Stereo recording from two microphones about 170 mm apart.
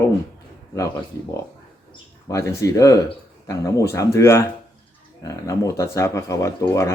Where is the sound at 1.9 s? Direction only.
20° left (ahead or behind).